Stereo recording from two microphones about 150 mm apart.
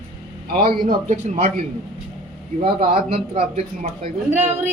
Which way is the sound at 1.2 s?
50° right (ahead or behind).